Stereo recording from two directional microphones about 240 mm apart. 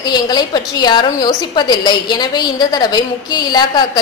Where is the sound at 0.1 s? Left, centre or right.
Centre.